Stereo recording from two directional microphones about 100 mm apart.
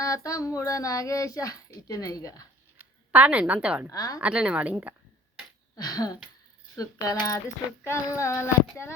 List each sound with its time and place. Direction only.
0.0 s a child's voice: 35° left (ahead or behind)
2.7 s a woman's voice: 15° right (ahead or behind)
3.9 s a child's voice: 35° left (ahead or behind)
4.2 s a woman's voice: 10° right (ahead or behind)
5.7 s a child's voice: 40° left (ahead or behind)